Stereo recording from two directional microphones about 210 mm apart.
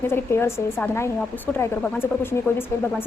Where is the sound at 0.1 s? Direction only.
10° left (ahead or behind).